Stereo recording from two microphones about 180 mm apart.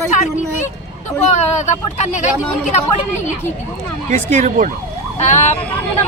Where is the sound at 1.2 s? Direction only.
40° left (ahead or behind).